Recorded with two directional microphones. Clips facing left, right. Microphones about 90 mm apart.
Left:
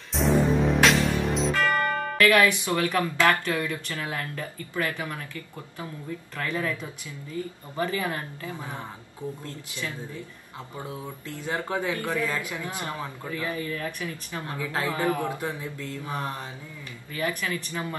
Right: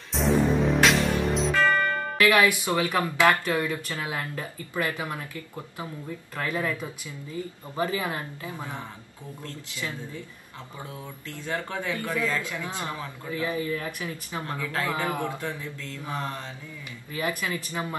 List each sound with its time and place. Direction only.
0.1 s music: centre (ahead or behind)
2.1 s speech: 15° right (ahead or behind)
10.9 s speech: 20° left (ahead or behind)
13.3 s speech: 15° right (ahead or behind)
14.6 s speech: 20° left (ahead or behind)
14.9 s a man's voice: 20° right (ahead or behind)
15.2 s mantra: 20° left (ahead or behind)
17.1 s speech: 20° right (ahead or behind)